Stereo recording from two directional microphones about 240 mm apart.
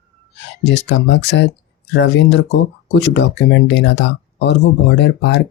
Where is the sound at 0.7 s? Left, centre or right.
Left.